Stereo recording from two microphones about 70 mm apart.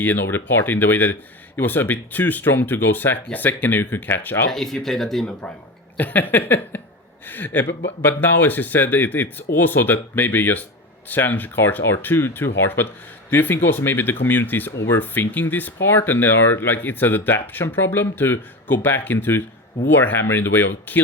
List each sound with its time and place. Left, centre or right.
0.0 s speech: left
4.5 s speech: centre
6.0 s speech: left